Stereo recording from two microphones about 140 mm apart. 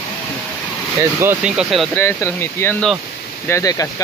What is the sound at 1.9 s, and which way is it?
Speech, 15° left (ahead or behind).